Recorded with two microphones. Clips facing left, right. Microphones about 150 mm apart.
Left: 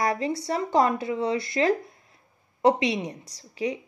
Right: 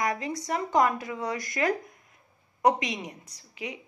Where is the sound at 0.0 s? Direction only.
30° left (ahead or behind).